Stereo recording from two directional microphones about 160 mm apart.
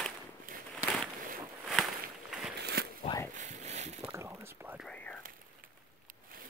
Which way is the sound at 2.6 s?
90° right.